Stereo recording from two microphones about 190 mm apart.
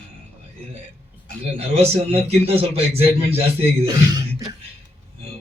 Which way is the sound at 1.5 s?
30° right (ahead or behind).